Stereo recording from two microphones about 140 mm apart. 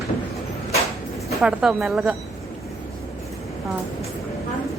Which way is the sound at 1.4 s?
5° right (ahead or behind).